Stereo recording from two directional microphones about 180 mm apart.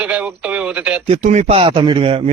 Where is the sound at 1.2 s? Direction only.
40° right (ahead or behind).